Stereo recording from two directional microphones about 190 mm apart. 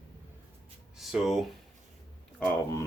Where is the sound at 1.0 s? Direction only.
Centre (ahead or behind).